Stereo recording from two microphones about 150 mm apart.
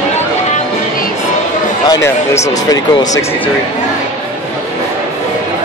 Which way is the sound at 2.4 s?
25° left (ahead or behind).